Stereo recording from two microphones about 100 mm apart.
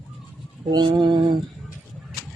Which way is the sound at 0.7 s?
45° right (ahead or behind).